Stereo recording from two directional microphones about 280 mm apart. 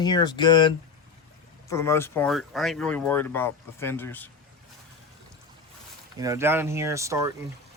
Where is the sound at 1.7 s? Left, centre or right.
Centre.